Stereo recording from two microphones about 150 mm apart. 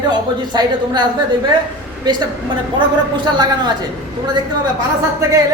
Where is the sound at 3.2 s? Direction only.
30° right (ahead or behind).